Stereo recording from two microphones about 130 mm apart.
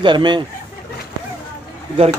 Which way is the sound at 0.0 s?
35° right (ahead or behind).